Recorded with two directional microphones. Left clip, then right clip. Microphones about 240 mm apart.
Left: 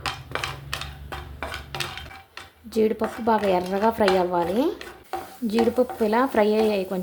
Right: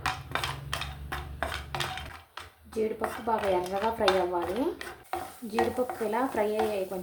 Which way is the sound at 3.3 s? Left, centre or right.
Left.